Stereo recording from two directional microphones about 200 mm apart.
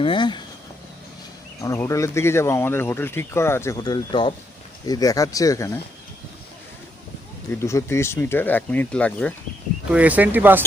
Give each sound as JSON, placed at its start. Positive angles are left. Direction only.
{"t": 0.0, "sound": "speech", "side_deg": 25}
{"t": 1.6, "sound": "speech", "side_deg": 15}
{"t": 7.5, "sound": "speech", "side_deg": 15}
{"t": 9.9, "sound": "speech", "side_deg": -5}